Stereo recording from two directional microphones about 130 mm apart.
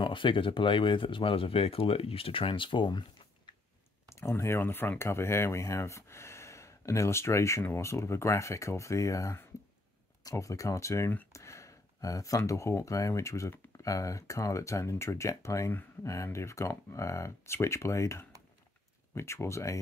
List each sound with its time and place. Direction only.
0.0 s speech: 40° left (ahead or behind)
4.1 s speech: 20° left (ahead or behind)